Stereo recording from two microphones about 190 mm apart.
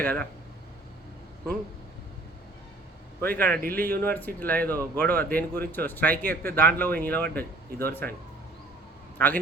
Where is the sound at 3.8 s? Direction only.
10° left (ahead or behind).